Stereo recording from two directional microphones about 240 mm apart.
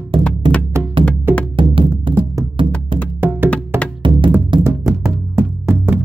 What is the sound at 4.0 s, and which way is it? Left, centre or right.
Music, right.